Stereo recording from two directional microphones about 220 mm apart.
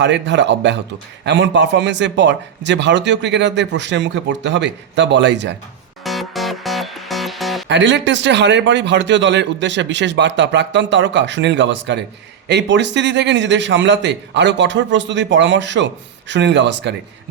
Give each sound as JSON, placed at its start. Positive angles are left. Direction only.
{"t": 0.0, "sound": "a man's voice", "side_deg": -55}
{"t": 6.1, "sound": "music", "side_deg": 0}
{"t": 7.7, "sound": "a man's voice", "side_deg": -55}